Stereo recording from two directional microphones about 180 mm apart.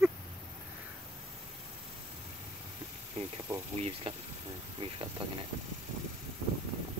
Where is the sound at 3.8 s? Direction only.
35° right (ahead or behind).